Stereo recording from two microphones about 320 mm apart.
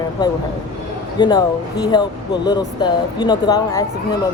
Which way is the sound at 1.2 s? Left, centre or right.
Centre.